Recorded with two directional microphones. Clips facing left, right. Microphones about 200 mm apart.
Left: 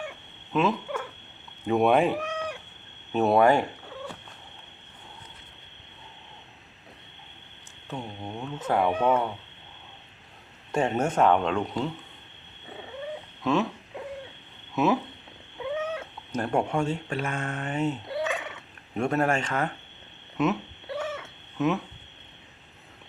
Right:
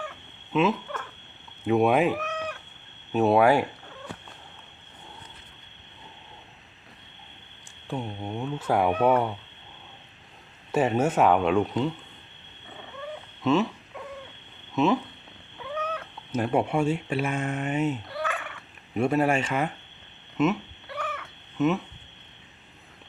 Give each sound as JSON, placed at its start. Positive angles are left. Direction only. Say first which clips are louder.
{"t": 0.5, "sound": "speech", "louder": "right 1 dB", "side_deg": 0}
{"t": 2.1, "sound": "cat", "louder": "left 1 dB", "side_deg": 15}
{"t": 3.1, "sound": "speech", "louder": "right 1 dB", "side_deg": 0}
{"t": 7.9, "sound": "speech", "louder": "right 3 dB", "side_deg": -5}
{"t": 10.7, "sound": "speech", "louder": "right 2 dB", "side_deg": -5}
{"t": 13.4, "sound": "speech", "louder": "right 2 dB", "side_deg": 0}
{"t": 14.8, "sound": "speech", "louder": "right 1 dB", "side_deg": 5}
{"t": 15.8, "sound": "cat", "louder": "left 1 dB", "side_deg": 25}
{"t": 16.3, "sound": "speech", "louder": "right 2 dB", "side_deg": -5}
{"t": 18.1, "sound": "gobble", "louder": "left 3 dB", "side_deg": 20}
{"t": 18.9, "sound": "speech", "louder": "right 2 dB", "side_deg": -5}
{"t": 20.3, "sound": "a sound", "louder": "right 2 dB", "side_deg": 0}
{"t": 20.8, "sound": "cat", "louder": "left 4 dB", "side_deg": 25}
{"t": 21.6, "sound": "speech", "louder": "right 2 dB", "side_deg": 0}